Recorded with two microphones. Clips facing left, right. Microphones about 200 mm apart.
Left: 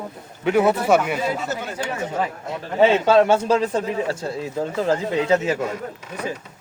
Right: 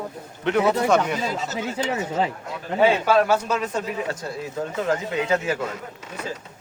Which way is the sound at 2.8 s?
25° left (ahead or behind).